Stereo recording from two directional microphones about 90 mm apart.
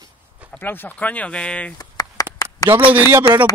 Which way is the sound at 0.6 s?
20° left (ahead or behind).